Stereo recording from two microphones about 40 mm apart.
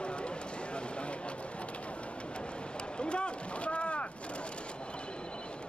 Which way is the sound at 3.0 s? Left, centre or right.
Left.